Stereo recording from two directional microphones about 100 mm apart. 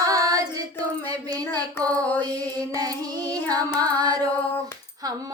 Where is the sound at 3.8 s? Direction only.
45° right (ahead or behind).